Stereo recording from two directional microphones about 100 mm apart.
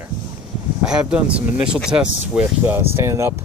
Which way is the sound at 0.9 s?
10° right (ahead or behind).